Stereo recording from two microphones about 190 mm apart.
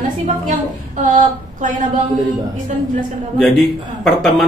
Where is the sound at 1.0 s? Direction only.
40° right (ahead or behind).